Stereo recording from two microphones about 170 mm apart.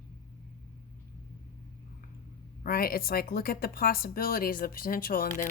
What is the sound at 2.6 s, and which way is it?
Speech, 60° left (ahead or behind).